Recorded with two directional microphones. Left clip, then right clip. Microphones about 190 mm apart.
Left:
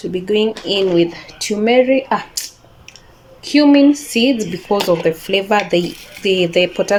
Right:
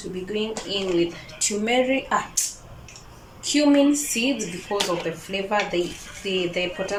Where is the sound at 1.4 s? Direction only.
35° left (ahead or behind).